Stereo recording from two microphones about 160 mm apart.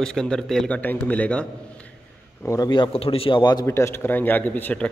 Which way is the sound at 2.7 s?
30° left (ahead or behind).